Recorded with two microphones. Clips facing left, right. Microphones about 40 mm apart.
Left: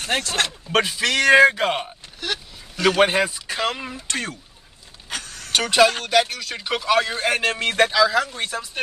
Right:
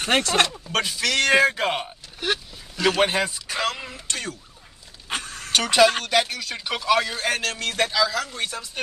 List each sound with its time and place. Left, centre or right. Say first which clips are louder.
0.0 s speech: right 2 dB; right
0.7 s speech: left 4 dB; centre
1.0 s speech: left 2 dB; left
1.3 s speech: left 6 dB; centre
2.1 s a sound: right 2 dB; centre
2.9 s a man's voice: left 4 dB; centre
4.1 s speech: left 3 dB; left
5.1 s a sound: right 2 dB; right
5.5 s speech: left 1 dB; centre; by 8.3 s left
8.3 s speech: left 2 dB; centre